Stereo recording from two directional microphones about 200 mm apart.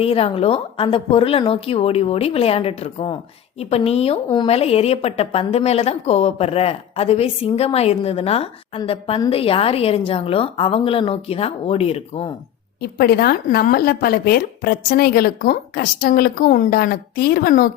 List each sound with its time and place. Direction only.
0.0 s a woman's voice: 30° left (ahead or behind)
12.8 s speech: 50° left (ahead or behind)